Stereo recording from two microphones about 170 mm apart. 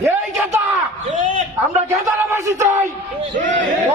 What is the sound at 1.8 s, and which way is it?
Speech, 15° right (ahead or behind).